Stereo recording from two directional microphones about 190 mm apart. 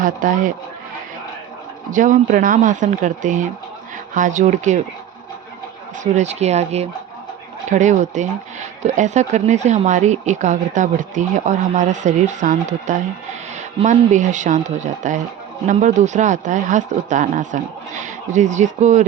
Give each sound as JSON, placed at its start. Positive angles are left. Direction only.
{"t": 0.0, "sound": "speech", "side_deg": -45}
{"t": 1.9, "sound": "speech", "side_deg": -45}
{"t": 6.0, "sound": "speech", "side_deg": -35}